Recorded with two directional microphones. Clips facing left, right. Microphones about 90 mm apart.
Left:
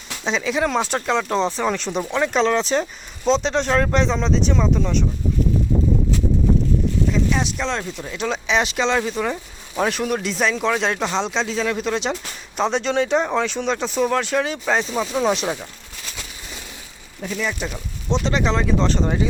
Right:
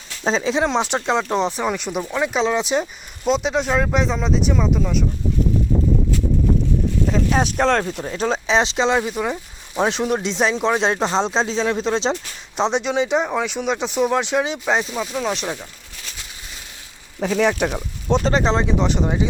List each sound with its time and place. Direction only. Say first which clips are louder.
0.3 s speech: right 2 dB; 30° right (ahead or behind); by 5.0 s 5° right (ahead or behind)
7.1 s speech: right 2 dB; 40° right (ahead or behind)
8.0 s speech: right 3 dB; 35° right (ahead or behind); by 14.8 s 15° right (ahead or behind)
15.2 s speech: left 5 dB; 5° left (ahead or behind)
17.2 s speech: right 7 dB; 75° right (ahead or behind); by 19.3 s 15° right (ahead or behind)